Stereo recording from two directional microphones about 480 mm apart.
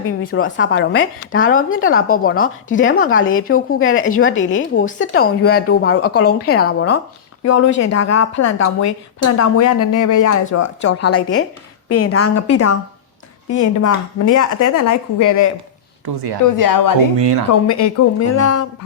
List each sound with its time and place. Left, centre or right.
0.0 s a woman's voice: left
13.7 s a woman's voice: left
16.0 s speech: right
16.5 s a woman's voice: left
17.2 s speech: right
17.5 s a woman's voice: left